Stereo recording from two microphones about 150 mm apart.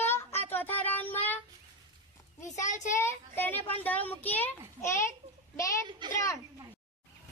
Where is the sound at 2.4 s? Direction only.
55° left (ahead or behind).